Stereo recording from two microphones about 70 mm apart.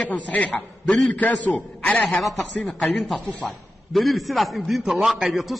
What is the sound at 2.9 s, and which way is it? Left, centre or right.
Speech, centre.